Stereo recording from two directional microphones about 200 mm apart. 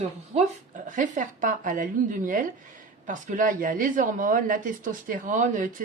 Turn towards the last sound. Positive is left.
turn(degrees=-40)  # may be behind; listen again after turning